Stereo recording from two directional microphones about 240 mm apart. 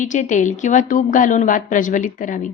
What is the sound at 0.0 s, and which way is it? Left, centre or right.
A woman's voice, left.